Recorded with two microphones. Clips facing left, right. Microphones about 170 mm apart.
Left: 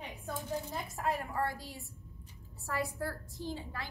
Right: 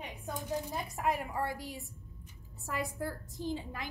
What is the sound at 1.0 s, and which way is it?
A woman's voice, 15° right (ahead or behind).